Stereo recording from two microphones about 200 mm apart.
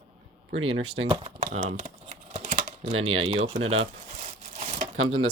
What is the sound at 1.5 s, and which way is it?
Typing, 30° right (ahead or behind).